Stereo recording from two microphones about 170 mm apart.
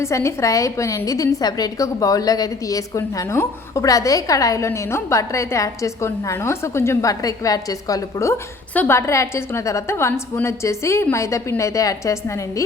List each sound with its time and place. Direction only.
0.0 s a woman's voice: 15° left (ahead or behind)